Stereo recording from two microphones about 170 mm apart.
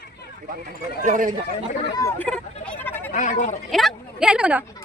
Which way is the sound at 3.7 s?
Centre (ahead or behind).